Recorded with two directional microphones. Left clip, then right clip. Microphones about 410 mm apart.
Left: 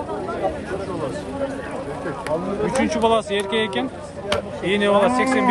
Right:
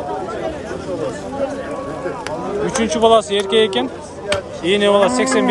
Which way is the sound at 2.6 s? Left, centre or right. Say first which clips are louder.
Right 5 dB; centre.